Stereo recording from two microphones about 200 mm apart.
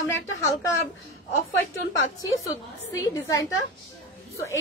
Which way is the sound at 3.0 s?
15° left (ahead or behind).